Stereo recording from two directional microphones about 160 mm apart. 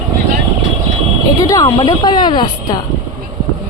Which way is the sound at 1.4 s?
20° left (ahead or behind).